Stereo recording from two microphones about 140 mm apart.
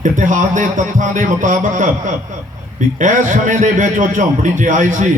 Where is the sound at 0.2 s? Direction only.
65° right (ahead or behind).